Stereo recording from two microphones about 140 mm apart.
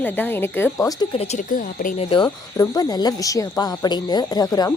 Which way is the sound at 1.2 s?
50° left (ahead or behind).